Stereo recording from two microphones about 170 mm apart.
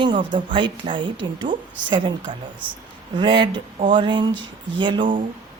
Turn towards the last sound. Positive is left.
turn(degrees=-30)  # may be behind; listen again after turning